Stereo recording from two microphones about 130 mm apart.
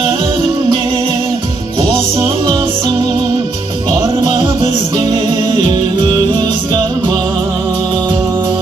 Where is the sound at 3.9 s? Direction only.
40° right (ahead or behind).